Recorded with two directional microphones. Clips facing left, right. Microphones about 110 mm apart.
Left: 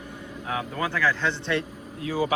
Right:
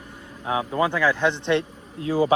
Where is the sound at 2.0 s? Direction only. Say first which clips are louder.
Right 5 dB; 30° right (ahead or behind).